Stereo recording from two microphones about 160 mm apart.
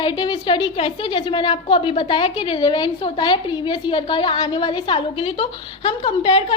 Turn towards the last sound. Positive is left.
turn(degrees=35)  # may be behind; listen again after turning